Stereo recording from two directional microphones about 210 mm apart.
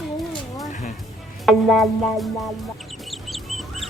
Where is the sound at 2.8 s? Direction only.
Centre (ahead or behind).